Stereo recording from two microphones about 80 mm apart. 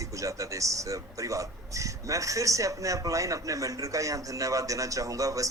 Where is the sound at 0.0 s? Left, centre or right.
Right.